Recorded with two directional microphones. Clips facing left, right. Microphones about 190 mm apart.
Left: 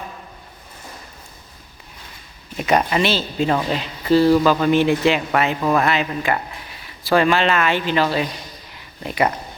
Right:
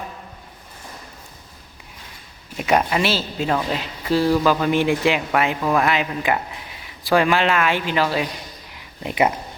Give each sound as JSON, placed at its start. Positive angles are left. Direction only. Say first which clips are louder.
{"t": 2.6, "sound": "speech", "louder": "left 1 dB", "side_deg": -5}
{"t": 5.9, "sound": "speech", "louder": "even", "side_deg": -10}